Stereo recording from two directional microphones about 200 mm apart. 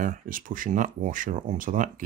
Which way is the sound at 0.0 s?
40° right (ahead or behind).